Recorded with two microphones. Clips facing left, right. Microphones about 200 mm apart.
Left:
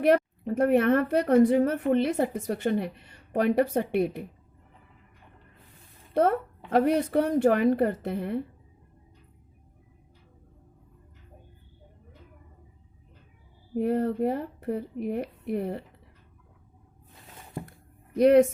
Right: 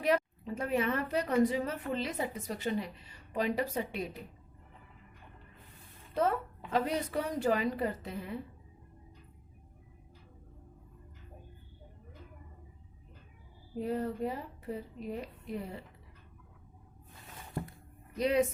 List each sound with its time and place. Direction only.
0.0 s a woman's voice: 60° left (ahead or behind)
6.1 s a woman's voice: 60° left (ahead or behind)
13.7 s a woman's voice: 60° left (ahead or behind)
18.2 s a woman's voice: 60° left (ahead or behind)